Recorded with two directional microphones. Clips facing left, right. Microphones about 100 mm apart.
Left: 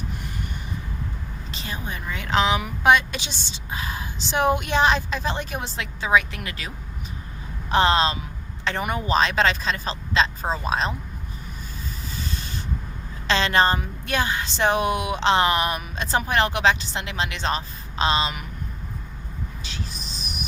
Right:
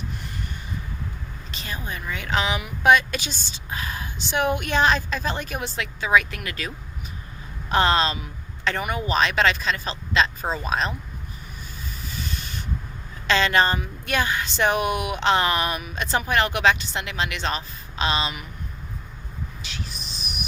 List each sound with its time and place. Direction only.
1.5 s a woman's voice: 25° left (ahead or behind)
7.7 s speech: 25° left (ahead or behind)
13.2 s speech: 30° left (ahead or behind)